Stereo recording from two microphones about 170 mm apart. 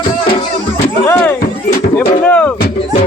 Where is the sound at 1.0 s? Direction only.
15° left (ahead or behind).